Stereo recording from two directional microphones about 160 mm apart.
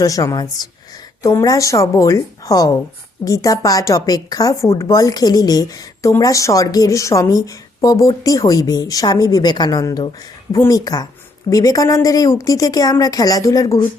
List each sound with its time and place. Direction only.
0.0 s speech: 20° left (ahead or behind)